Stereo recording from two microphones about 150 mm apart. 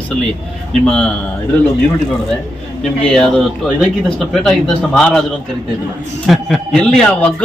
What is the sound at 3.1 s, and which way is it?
Speech, 5° left (ahead or behind).